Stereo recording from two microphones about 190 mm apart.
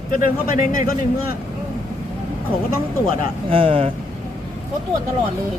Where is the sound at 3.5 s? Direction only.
30° right (ahead or behind).